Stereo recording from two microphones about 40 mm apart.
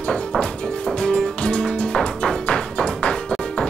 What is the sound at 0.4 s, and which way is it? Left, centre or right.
Music, left.